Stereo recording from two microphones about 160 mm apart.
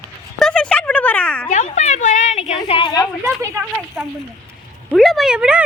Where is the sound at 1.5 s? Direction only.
50° left (ahead or behind).